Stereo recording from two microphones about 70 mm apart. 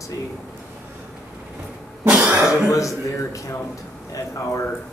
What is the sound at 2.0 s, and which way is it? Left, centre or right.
Cough, centre.